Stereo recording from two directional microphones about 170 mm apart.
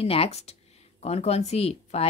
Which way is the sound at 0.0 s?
35° left (ahead or behind).